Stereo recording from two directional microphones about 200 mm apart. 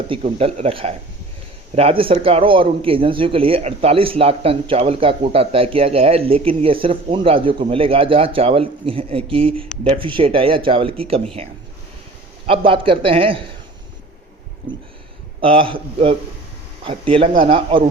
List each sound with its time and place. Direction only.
0.2 s speech: 30° right (ahead or behind)
12.5 s speech: 25° right (ahead or behind)
15.4 s speech: 25° right (ahead or behind)